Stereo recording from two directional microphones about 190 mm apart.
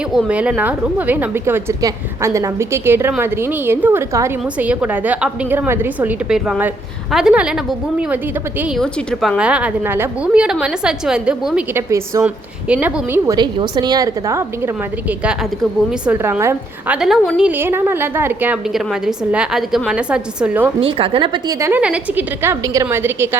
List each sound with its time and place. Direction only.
0.1 s a woman's voice: 5° right (ahead or behind)
8.8 s a woman's voice: 5° left (ahead or behind)
9.4 s a woman's voice: 5° right (ahead or behind)
20.8 s a woman's voice: 30° right (ahead or behind)
21.7 s a woman's voice: 5° right (ahead or behind)